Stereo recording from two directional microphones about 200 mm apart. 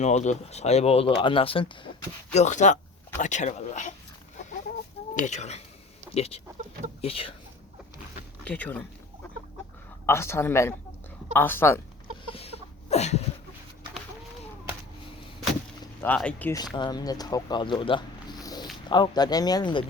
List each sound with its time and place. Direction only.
0.0 s speech: 35° left (ahead or behind)
2.3 s speech: 35° left (ahead or behind)
5.1 s speech: 35° left (ahead or behind)
8.4 s speech: 5° left (ahead or behind)
10.1 s speech: 15° left (ahead or behind)
12.3 s a sound: 30° left (ahead or behind)
16.0 s speech: 5° left (ahead or behind)
16.7 s speech: 20° left (ahead or behind)